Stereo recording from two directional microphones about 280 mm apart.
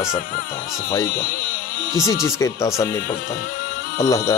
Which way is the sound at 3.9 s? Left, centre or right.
Centre.